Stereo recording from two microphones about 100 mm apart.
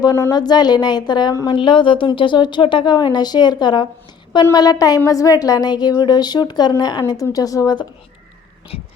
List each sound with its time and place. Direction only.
0.0 s speech: 35° left (ahead or behind)
1.5 s a woman's voice: 55° left (ahead or behind); by 7.8 s 35° left (ahead or behind)